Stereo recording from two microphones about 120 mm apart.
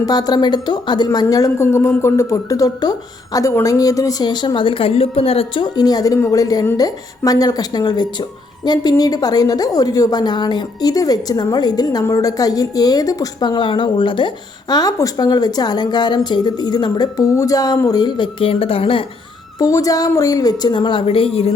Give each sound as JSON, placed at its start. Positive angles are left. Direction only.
{"t": 0.0, "sound": "a woman's voice", "side_deg": 35}
{"t": 19.5, "sound": "a woman's voice", "side_deg": 30}